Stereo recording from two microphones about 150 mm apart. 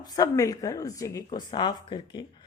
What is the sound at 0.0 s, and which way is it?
Speech, 25° left (ahead or behind).